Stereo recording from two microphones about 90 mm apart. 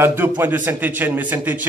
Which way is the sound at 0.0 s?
25° right (ahead or behind).